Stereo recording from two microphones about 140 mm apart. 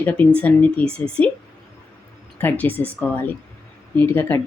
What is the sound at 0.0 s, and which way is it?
Speech, 10° left (ahead or behind).